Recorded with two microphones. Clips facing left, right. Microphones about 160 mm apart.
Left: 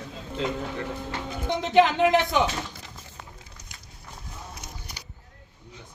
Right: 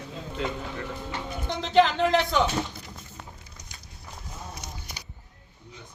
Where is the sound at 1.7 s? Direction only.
15° left (ahead or behind).